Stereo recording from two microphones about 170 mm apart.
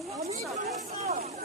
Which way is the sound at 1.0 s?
45° right (ahead or behind).